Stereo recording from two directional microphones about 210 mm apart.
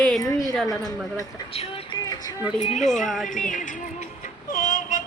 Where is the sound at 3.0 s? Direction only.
Centre (ahead or behind).